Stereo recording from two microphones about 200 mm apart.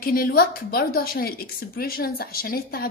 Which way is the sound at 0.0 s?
45° left (ahead or behind).